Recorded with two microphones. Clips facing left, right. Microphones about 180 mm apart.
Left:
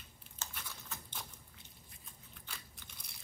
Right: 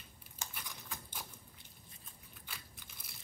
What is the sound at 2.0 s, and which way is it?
Biting, 5° right (ahead or behind).